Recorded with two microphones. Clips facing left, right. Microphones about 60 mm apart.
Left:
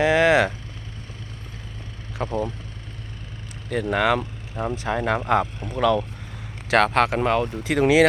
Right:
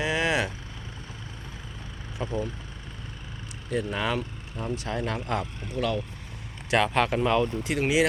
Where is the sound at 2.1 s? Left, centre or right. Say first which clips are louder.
Left 4 dB; left.